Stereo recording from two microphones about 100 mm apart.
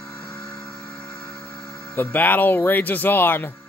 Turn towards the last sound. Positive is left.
turn(degrees=20)  # may be behind; listen again after turning